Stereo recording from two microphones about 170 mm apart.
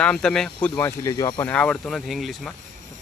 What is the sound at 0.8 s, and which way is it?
Speech, 15° left (ahead or behind).